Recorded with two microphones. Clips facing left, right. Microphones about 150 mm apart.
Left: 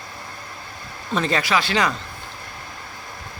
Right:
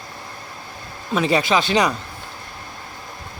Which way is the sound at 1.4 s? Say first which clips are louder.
Right 3 dB; 20° right (ahead or behind).